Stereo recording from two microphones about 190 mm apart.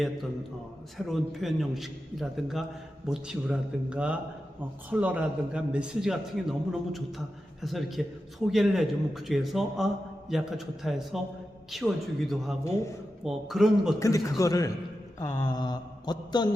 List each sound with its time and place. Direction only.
0.9 s a man's voice: centre (ahead or behind)
12.6 s a man's voice: 15° left (ahead or behind)
13.2 s a man's voice: centre (ahead or behind)
14.0 s a man's voice: 15° left (ahead or behind)
15.2 s mantra: 20° left (ahead or behind)